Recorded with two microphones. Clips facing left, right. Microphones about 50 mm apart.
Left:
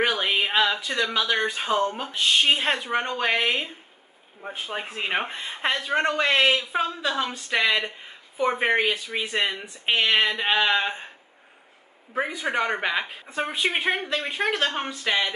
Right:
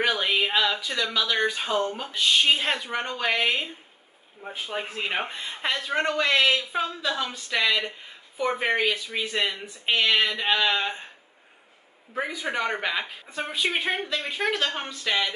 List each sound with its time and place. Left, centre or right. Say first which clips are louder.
0.0 s a sound: left 1 dB; centre
1.5 s speech: left 2 dB; centre
12.1 s speech: left 3 dB; left